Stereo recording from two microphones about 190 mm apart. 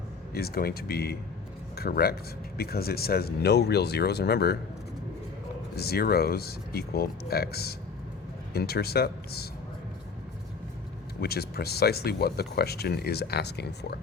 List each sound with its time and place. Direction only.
0.3 s speech: 55° left (ahead or behind)
5.7 s speech: 55° left (ahead or behind)
11.2 s speech: 55° left (ahead or behind)